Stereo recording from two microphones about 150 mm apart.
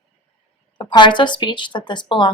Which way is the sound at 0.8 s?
30° left (ahead or behind).